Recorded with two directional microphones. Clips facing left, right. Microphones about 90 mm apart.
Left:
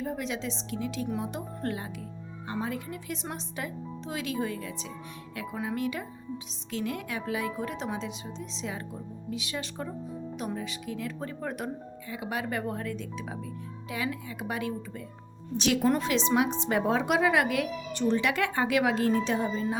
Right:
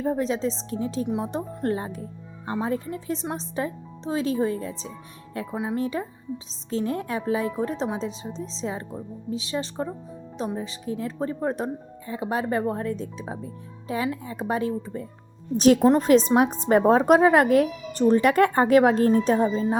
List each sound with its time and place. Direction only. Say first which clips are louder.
0.0 s speech: right 8 dB; 35° right (ahead or behind)